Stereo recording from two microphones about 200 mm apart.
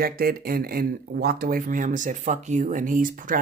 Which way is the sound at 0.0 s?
45° right (ahead or behind).